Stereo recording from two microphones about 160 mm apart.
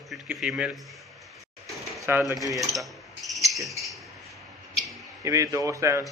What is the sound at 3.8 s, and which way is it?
Mouse, centre (ahead or behind).